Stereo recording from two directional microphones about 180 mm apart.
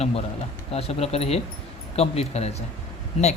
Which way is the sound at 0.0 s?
35° left (ahead or behind).